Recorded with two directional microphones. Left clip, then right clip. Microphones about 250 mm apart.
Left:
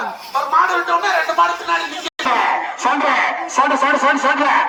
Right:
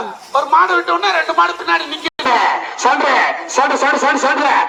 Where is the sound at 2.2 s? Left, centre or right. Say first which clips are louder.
Right 2 dB; right.